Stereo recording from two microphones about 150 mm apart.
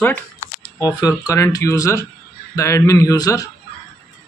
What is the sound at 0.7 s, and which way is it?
Speech, 25° left (ahead or behind).